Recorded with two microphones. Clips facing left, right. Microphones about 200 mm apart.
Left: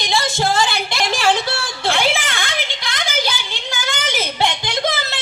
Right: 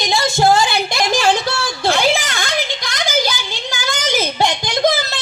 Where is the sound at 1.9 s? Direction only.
40° right (ahead or behind).